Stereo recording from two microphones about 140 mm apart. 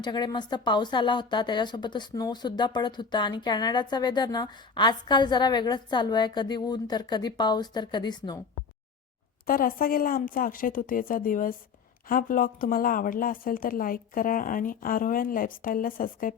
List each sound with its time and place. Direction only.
0.0 s a woman's voice: 30° left (ahead or behind)
9.5 s a woman's voice: 90° left